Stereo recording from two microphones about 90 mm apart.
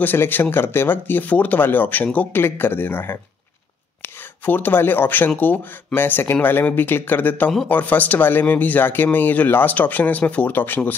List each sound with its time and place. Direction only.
0.0 s speech: 20° left (ahead or behind)
4.5 s speech: 25° left (ahead or behind)